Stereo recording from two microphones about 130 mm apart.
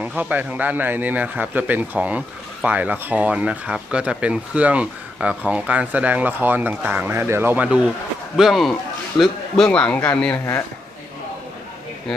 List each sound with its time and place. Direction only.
0.0 s a man's voice: 10° right (ahead or behind); by 10.4 s 10° left (ahead or behind)